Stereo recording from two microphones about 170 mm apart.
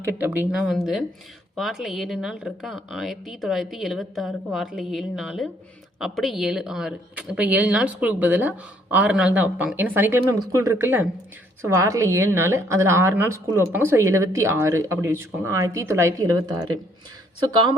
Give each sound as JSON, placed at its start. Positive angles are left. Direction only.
{"t": 0.0, "sound": "a woman's voice", "side_deg": -10}